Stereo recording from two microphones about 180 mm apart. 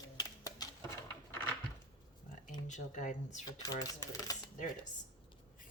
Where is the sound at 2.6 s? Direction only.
45° left (ahead or behind).